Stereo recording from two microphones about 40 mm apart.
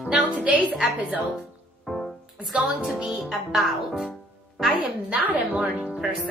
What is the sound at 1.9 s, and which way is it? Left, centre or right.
Music, centre.